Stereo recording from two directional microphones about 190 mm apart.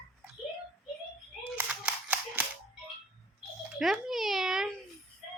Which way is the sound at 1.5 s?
10° right (ahead or behind).